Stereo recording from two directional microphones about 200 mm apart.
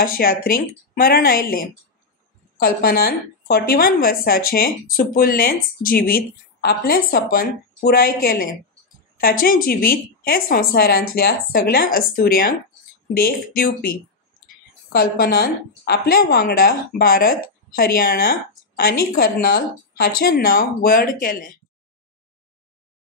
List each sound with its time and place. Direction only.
0.0 s a woman's voice: 45° left (ahead or behind)